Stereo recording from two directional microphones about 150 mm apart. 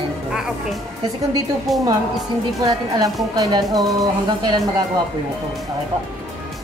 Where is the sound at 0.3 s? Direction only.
5° right (ahead or behind).